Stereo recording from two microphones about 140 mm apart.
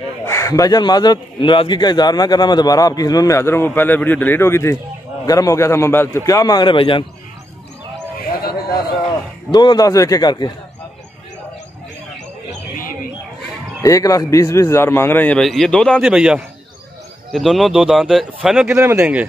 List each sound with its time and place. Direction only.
0.3 s a man's voice: 25° left (ahead or behind)
9.5 s a man's voice: 30° left (ahead or behind)
13.8 s a man's voice: 25° left (ahead or behind); by 16.0 s 5° left (ahead or behind)
16.0 s speech: 5° right (ahead or behind)
18.7 s speech: 20° right (ahead or behind)